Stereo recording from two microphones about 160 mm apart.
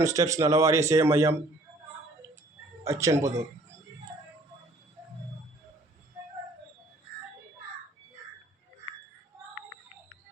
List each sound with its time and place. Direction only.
0.0 s a man's voice: 20° right (ahead or behind)
2.8 s a man's voice: 20° right (ahead or behind)